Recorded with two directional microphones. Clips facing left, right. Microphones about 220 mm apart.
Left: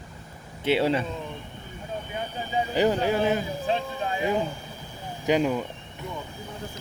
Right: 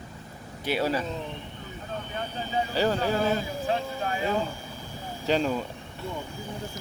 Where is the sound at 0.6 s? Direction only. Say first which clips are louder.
Left 4 dB; 25° left (ahead or behind).